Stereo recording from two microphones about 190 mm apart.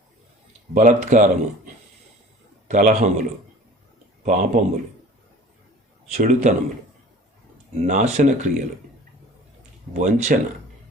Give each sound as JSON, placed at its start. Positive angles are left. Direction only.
{"t": 0.7, "sound": "speech", "side_deg": -40}
{"t": 6.1, "sound": "speech", "side_deg": -40}
{"t": 7.9, "sound": "speech", "side_deg": -40}
{"t": 9.9, "sound": "speech", "side_deg": -40}